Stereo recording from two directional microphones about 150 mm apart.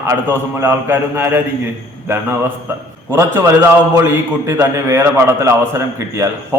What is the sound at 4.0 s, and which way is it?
A man's voice, 15° right (ahead or behind).